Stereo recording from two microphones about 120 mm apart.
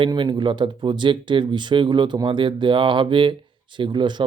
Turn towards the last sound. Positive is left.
turn(degrees=-40)  # may be behind; listen again after turning